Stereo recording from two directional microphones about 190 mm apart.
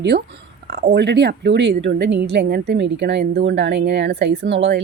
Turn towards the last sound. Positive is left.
turn(degrees=-65)  # may be behind; listen again after turning